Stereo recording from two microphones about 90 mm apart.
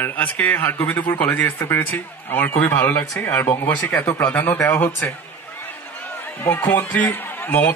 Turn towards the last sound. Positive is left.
turn(degrees=20)  # may be behind; listen again after turning